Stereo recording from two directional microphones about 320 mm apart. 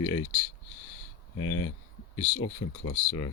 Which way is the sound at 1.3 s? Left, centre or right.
Left.